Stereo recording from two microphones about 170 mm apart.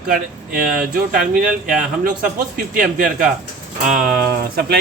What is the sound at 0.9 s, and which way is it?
Speech, 55° right (ahead or behind).